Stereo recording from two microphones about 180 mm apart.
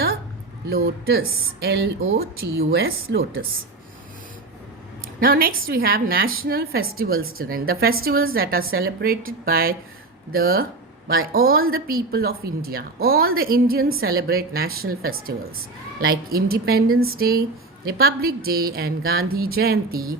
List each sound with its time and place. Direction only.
0.7 s a woman's voice: 60° right (ahead or behind)
5.2 s a woman's voice: 55° right (ahead or behind)